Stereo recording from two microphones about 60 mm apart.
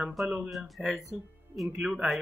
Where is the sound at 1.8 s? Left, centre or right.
Centre.